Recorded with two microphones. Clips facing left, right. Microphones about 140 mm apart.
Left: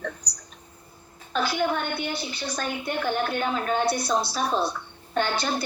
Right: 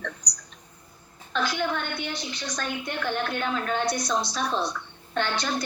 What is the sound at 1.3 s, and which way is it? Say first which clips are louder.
A woman's voice: left 2 dB; 10° left (ahead or behind).